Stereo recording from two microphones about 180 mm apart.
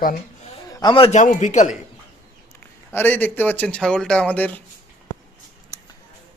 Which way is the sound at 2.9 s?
10° left (ahead or behind).